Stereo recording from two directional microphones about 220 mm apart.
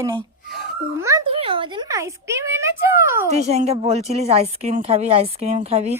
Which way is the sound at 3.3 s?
30° right (ahead or behind).